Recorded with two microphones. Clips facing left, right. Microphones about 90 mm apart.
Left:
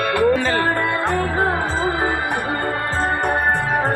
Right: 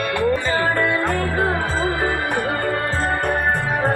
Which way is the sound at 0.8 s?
25° left (ahead or behind).